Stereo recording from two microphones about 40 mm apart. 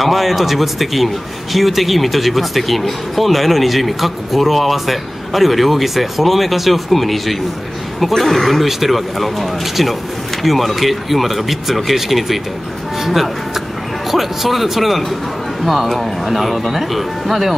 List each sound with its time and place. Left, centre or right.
0.0 s a man's voice: centre